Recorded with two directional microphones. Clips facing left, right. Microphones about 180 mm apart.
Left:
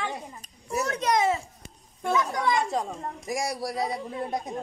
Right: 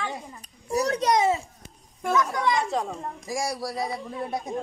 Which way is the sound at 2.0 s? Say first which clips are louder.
Right 1 dB; 20° left (ahead or behind).